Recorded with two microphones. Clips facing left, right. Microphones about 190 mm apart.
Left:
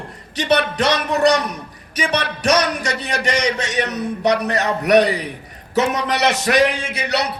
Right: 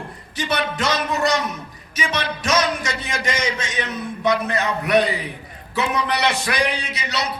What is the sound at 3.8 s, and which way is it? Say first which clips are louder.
A man's voice: left 5 dB; 40° left (ahead or behind).